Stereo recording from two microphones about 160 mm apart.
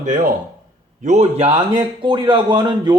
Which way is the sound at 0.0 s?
55° right (ahead or behind).